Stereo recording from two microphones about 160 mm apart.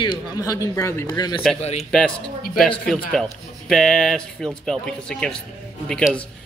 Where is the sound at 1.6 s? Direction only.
40° left (ahead or behind).